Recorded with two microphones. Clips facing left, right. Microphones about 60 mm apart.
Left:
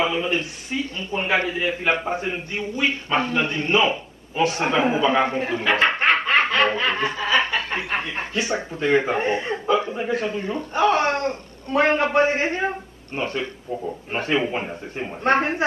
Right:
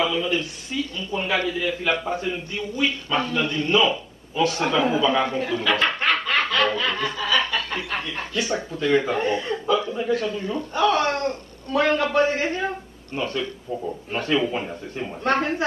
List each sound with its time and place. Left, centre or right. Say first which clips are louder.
0.0 s a man's voice: left 1 dB; left